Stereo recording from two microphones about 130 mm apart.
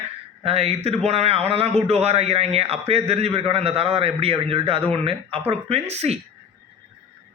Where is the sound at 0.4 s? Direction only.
50° right (ahead or behind).